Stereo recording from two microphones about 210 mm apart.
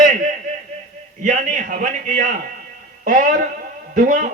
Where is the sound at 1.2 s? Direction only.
35° right (ahead or behind).